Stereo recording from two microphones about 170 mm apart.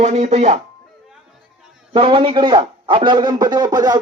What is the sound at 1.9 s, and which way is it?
A man's voice, 30° right (ahead or behind).